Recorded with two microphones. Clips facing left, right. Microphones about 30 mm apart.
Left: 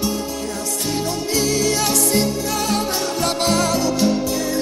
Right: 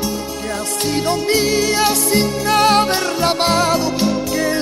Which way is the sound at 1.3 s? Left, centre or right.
Right.